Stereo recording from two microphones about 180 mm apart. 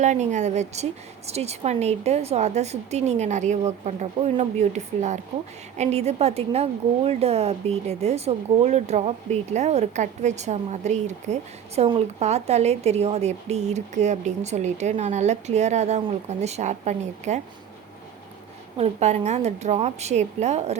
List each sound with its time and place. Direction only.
0.0 s a woman's voice: 40° right (ahead or behind)
18.8 s a woman's voice: 35° right (ahead or behind)